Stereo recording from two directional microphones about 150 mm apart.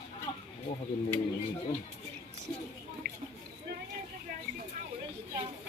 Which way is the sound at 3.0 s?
75° right (ahead or behind).